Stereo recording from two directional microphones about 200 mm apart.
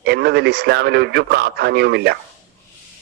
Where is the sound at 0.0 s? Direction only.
55° right (ahead or behind).